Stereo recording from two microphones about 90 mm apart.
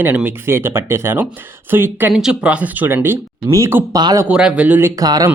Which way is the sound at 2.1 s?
5° right (ahead or behind).